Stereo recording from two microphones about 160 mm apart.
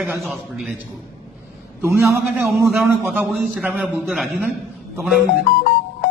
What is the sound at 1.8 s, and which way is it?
Speech, 15° right (ahead or behind).